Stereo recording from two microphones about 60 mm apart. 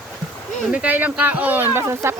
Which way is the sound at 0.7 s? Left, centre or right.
Right.